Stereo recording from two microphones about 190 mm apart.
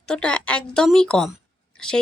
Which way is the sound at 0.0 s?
5° left (ahead or behind).